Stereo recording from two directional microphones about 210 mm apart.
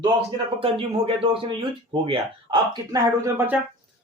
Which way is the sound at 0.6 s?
25° right (ahead or behind).